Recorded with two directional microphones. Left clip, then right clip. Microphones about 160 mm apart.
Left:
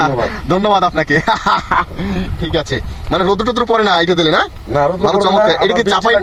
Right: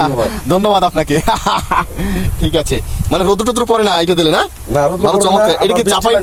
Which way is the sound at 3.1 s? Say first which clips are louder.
Right 1 dB; 15° right (ahead or behind).